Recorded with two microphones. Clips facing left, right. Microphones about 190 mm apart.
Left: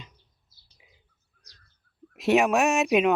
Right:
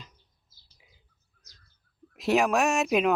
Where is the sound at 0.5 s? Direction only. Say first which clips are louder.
Even; 90° right.